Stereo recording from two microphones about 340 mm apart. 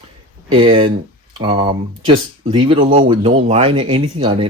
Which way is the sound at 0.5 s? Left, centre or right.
Centre.